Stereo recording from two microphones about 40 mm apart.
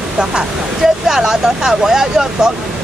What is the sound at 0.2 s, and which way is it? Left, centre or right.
Speech, centre.